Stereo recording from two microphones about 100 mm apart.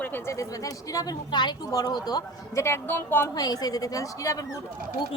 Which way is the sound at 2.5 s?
25° left (ahead or behind).